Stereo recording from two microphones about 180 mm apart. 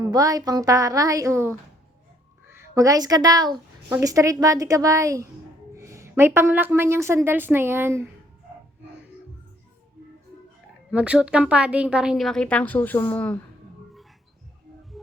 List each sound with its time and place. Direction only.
0.0 s a woman's voice: 20° right (ahead or behind)
2.7 s a woman's voice: 20° right (ahead or behind)
10.9 s a woman's voice: 5° right (ahead or behind); by 13.3 s 10° left (ahead or behind)